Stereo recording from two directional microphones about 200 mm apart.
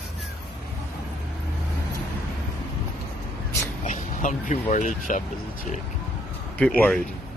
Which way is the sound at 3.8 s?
40° left (ahead or behind).